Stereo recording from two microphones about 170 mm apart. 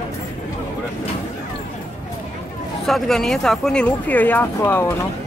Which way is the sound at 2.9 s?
Centre (ahead or behind).